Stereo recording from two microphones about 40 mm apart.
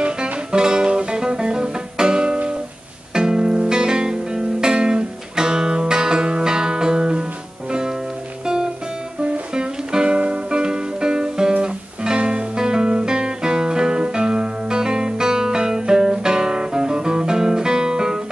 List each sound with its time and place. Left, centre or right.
0.0 s music: right
9.2 s music: right